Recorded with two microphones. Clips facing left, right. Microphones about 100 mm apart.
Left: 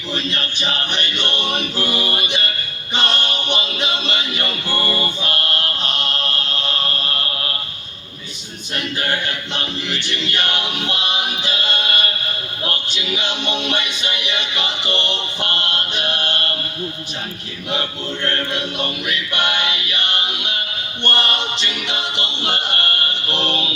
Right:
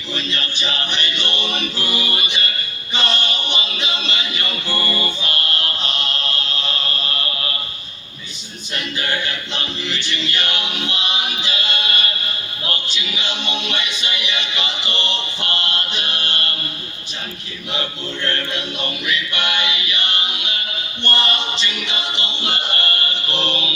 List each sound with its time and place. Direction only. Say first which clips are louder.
0.1 s a capella: left 1 dB; 50° left (ahead or behind)
5.2 s music: left 1 dB; 50° left (ahead or behind)
8.7 s a capella: left 1 dB; 50° left (ahead or behind)
12.6 s music: left 2 dB; 50° left (ahead or behind)
15.9 s choir: left 3 dB; 50° left (ahead or behind)
17.7 s choir: left 2 dB; 50° left (ahead or behind)
21.0 s a capella: left 1 dB; 55° left (ahead or behind)
23.3 s a sound: left 2 dB; 55° left (ahead or behind)